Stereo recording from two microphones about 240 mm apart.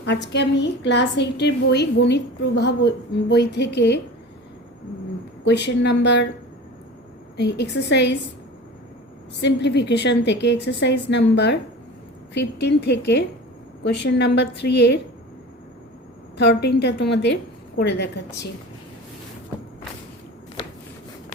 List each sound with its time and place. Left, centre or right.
0.0 s a woman's voice: left
5.5 s a woman's voice: left
7.3 s a woman's voice: left
9.4 s a woman's voice: left
16.4 s a woman's voice: left